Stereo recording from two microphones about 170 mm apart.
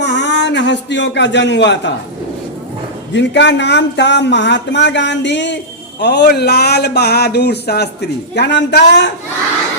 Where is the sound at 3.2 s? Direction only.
90° left.